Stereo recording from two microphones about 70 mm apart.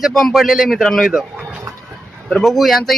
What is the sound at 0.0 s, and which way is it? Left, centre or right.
Speech, centre.